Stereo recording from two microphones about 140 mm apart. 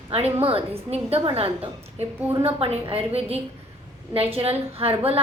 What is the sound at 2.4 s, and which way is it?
A woman's voice, 40° right (ahead or behind).